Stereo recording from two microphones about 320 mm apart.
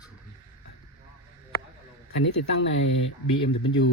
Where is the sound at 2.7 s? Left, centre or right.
Left.